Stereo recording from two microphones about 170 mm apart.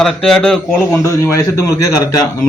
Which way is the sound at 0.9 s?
15° left (ahead or behind).